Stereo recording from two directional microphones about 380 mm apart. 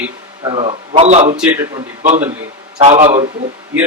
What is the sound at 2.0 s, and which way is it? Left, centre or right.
Speech, centre.